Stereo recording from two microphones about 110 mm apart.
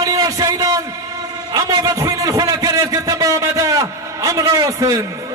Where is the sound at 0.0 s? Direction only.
35° right (ahead or behind).